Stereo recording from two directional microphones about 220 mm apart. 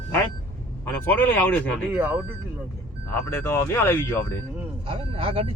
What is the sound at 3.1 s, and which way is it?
Speech, 10° left (ahead or behind).